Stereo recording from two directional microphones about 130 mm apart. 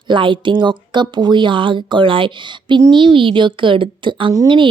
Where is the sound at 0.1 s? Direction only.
40° right (ahead or behind).